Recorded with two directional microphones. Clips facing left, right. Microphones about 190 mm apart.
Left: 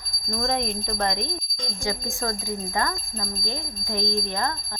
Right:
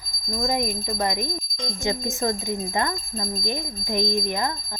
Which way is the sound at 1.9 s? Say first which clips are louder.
Right 4 dB; 20° right (ahead or behind).